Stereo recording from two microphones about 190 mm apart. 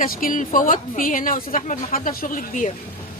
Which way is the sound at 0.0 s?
45° left (ahead or behind).